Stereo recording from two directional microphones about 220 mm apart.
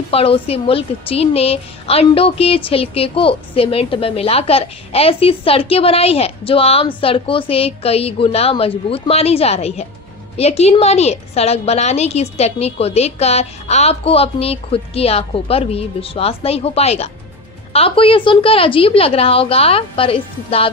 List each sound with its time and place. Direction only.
0.1 s a woman's voice: 25° left (ahead or behind)